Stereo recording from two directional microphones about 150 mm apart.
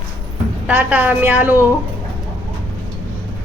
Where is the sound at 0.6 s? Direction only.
10° right (ahead or behind).